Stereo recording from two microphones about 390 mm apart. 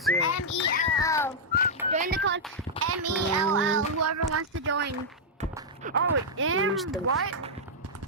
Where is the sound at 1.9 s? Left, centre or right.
Right.